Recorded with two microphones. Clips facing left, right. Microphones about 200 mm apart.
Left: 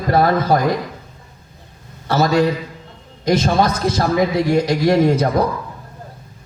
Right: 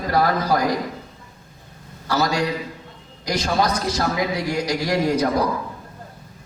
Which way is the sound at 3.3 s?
25° left (ahead or behind).